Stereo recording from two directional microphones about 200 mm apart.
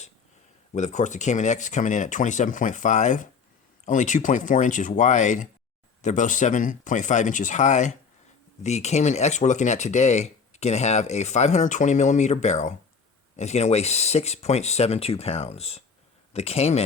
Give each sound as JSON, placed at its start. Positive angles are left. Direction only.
{"t": 0.7, "sound": "speech", "side_deg": 35}